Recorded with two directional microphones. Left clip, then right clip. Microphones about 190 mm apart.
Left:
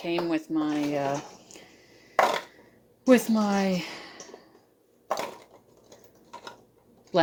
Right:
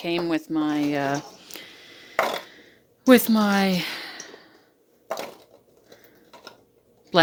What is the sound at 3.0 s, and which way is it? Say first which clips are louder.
A woman's voice: right 4 dB; 35° right (ahead or behind).